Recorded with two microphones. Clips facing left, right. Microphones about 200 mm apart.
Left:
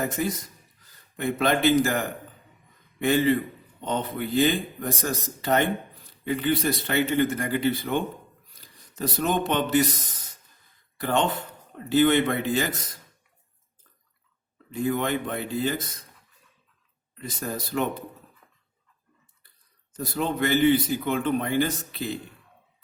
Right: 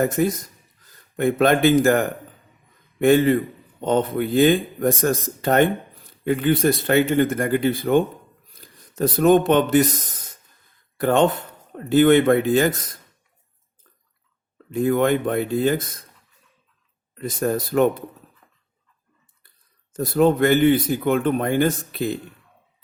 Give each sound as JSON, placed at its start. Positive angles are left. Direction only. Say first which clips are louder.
{"t": 0.0, "sound": "a man's voice", "louder": "right 7 dB", "side_deg": -50}
{"t": 14.7, "sound": "a man's voice", "louder": "right 7 dB", "side_deg": -50}
{"t": 17.2, "sound": "a man's voice", "louder": "right 10 dB", "side_deg": -50}
{"t": 19.9, "sound": "a man's voice", "louder": "right 10 dB", "side_deg": -50}